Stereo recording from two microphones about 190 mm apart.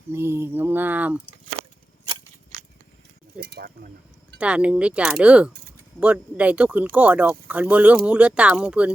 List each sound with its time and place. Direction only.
0.1 s speech: 15° right (ahead or behind)
3.3 s cutlery: 55° right (ahead or behind)
4.4 s speech: 5° right (ahead or behind)